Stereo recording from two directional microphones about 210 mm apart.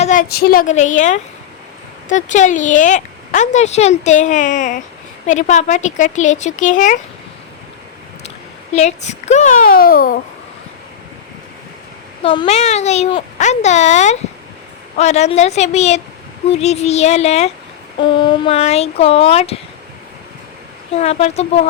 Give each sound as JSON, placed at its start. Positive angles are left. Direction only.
{"t": 0.0, "sound": "speech", "side_deg": 40}
{"t": 0.7, "sound": "speech", "side_deg": 35}
{"t": 8.7, "sound": "speech", "side_deg": 30}
{"t": 12.2, "sound": "speech", "side_deg": 25}
{"t": 20.9, "sound": "speech", "side_deg": 30}